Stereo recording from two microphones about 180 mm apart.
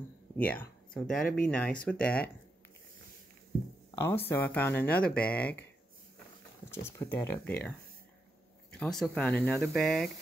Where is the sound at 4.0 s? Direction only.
15° left (ahead or behind).